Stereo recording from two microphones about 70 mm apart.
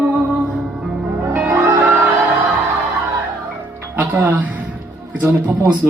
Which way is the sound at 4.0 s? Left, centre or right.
Right.